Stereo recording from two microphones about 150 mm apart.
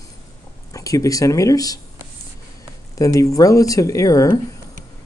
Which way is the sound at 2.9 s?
20° left (ahead or behind).